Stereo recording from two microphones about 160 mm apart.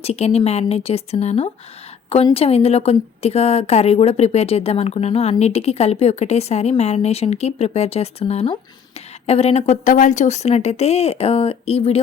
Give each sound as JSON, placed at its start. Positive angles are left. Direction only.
{"t": 0.0, "sound": "a woman's voice", "side_deg": 40}